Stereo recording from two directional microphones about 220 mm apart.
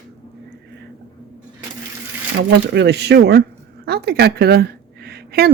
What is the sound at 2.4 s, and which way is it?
A woman's voice, 50° right (ahead or behind).